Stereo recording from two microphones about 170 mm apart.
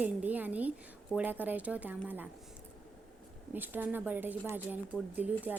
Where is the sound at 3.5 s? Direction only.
10° right (ahead or behind).